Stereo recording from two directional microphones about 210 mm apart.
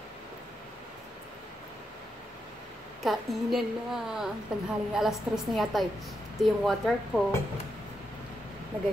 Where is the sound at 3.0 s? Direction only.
Centre (ahead or behind).